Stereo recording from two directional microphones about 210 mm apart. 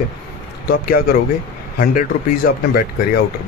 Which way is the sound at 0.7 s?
45° left (ahead or behind).